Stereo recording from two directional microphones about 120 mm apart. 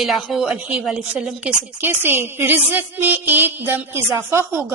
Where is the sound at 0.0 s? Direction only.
Centre (ahead or behind).